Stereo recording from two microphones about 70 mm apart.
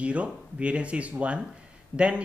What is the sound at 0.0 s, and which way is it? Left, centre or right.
A man's voice, centre.